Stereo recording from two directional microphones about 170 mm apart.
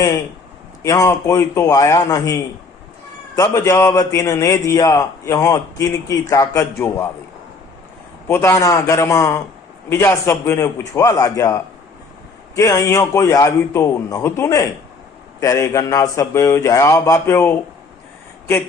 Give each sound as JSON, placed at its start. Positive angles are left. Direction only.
{"t": 0.8, "sound": "a man's voice", "side_deg": 15}
{"t": 8.3, "sound": "a man's voice", "side_deg": 15}